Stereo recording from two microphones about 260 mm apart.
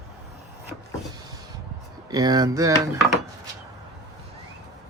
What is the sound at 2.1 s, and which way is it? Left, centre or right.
Speech, centre.